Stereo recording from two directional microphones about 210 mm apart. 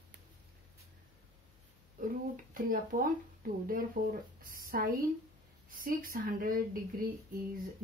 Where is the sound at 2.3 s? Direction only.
40° right (ahead or behind).